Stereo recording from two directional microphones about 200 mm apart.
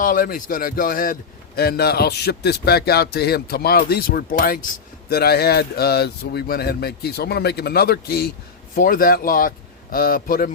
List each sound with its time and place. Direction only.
0.0 s a man's voice: 45° left (ahead or behind)